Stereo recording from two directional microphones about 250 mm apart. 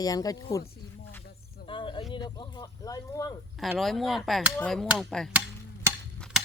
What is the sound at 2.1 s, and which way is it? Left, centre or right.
Speech, centre.